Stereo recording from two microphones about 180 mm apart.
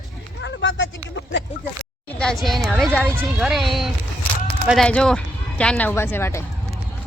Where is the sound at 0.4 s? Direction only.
90° left.